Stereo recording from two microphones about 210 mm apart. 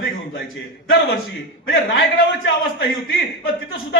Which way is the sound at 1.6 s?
50° left (ahead or behind).